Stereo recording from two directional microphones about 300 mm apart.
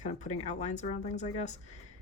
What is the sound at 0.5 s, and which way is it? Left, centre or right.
Speech, left.